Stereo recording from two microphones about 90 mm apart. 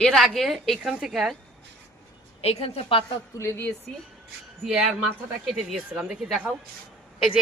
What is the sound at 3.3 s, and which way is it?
Speech, 30° left (ahead or behind).